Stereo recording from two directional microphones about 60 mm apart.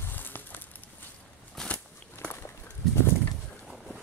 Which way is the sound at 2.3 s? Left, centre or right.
Left.